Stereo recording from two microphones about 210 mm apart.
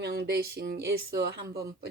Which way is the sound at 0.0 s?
50° right (ahead or behind).